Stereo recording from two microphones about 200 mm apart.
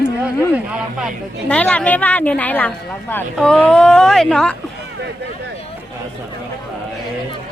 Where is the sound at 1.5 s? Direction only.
5° left (ahead or behind).